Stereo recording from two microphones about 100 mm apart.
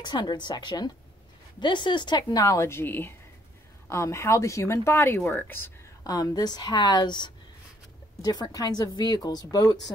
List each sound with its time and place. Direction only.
0.0 s a woman's voice: 45° left (ahead or behind); by 5.7 s 20° left (ahead or behind)
6.0 s a woman's voice: 40° left (ahead or behind)